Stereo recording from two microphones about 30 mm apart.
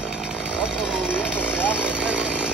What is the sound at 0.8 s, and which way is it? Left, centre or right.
Vehicle, right.